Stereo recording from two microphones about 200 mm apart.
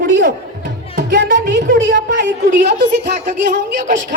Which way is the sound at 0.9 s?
60° right (ahead or behind).